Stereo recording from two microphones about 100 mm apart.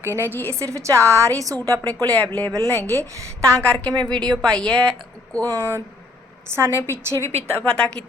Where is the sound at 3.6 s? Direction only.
10° left (ahead or behind).